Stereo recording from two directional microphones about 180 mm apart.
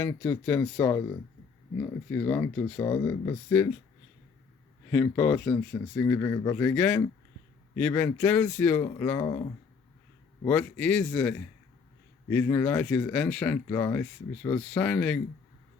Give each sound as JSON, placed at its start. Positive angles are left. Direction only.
{"t": 0.0, "sound": "speech", "side_deg": 15}
{"t": 4.9, "sound": "speech", "side_deg": 10}
{"t": 10.4, "sound": "speech", "side_deg": 10}